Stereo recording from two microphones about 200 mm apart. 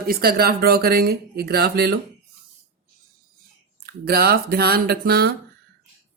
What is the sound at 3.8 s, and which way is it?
Speech, 50° right (ahead or behind).